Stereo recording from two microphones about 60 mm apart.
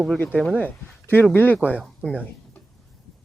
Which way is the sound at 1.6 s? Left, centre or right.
Left.